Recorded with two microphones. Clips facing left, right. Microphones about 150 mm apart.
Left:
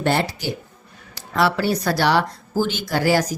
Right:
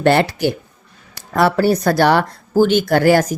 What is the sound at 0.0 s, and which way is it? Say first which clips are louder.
Speech: right 7 dB; 70° right (ahead or behind).